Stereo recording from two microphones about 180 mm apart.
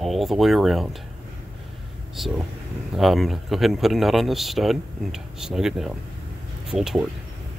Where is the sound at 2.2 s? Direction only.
Centre (ahead or behind).